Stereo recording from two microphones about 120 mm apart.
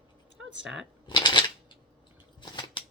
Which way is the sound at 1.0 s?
40° left (ahead or behind).